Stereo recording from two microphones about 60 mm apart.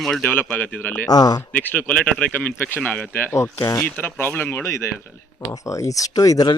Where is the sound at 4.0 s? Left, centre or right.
Left.